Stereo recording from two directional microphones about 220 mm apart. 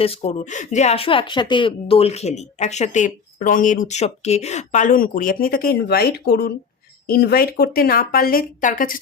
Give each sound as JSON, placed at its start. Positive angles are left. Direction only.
{"t": 0.0, "sound": "speech", "side_deg": 25}